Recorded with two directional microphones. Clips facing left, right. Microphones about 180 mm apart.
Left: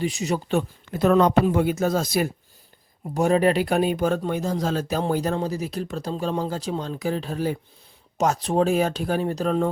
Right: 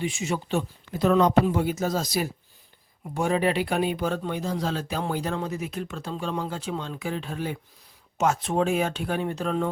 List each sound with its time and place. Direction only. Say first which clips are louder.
0.0 s speech: left 3 dB; 40° left (ahead or behind)
0.5 s speech: left 3 dB; 50° left (ahead or behind)
3.2 s speech: left 5 dB; 40° left (ahead or behind)